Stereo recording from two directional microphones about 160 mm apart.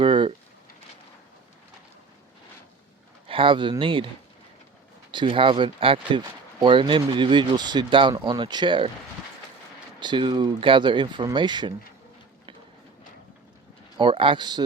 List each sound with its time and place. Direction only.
0.0 s a sound: 30° right (ahead or behind)
3.2 s speech: 35° right (ahead or behind)
5.1 s speech: 30° right (ahead or behind)
10.0 s speech: 30° right (ahead or behind)
13.9 s speech: 30° right (ahead or behind)